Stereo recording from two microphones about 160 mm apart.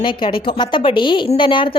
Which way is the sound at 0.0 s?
30° left (ahead or behind).